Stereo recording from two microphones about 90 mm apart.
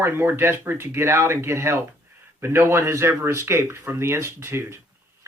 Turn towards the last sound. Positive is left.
turn(degrees=-30)  # may be behind; listen again after turning